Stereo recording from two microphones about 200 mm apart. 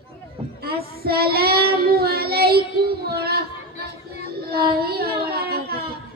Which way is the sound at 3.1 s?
50° right (ahead or behind).